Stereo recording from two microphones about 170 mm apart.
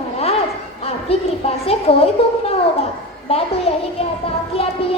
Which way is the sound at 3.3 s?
35° left (ahead or behind).